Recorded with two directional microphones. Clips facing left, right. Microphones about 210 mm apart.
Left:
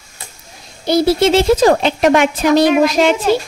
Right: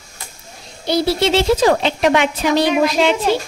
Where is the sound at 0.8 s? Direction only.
45° left (ahead or behind).